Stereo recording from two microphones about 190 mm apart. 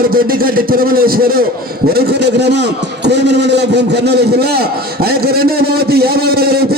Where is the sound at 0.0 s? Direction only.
50° right (ahead or behind).